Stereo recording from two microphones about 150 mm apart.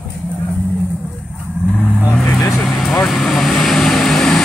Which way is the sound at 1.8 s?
15° left (ahead or behind).